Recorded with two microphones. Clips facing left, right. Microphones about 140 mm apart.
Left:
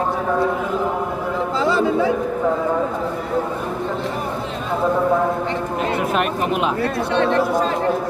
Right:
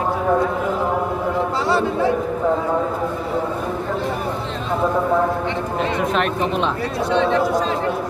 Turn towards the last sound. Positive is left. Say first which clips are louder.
# even
turn(degrees=5)  # may be behind; listen again after turning